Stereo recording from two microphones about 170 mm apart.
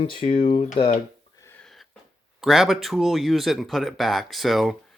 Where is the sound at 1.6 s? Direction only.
Centre (ahead or behind).